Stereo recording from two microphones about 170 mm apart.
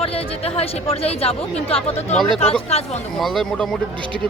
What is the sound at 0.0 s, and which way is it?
Speech, 35° left (ahead or behind).